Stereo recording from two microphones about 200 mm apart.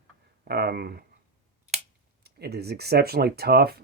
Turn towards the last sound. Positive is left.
turn(degrees=-50)  # may be behind; listen again after turning